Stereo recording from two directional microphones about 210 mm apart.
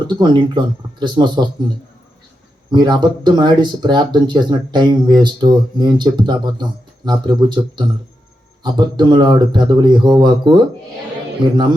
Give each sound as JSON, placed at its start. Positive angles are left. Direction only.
{"t": 0.1, "sound": "speech", "side_deg": -20}
{"t": 2.6, "sound": "speech", "side_deg": -20}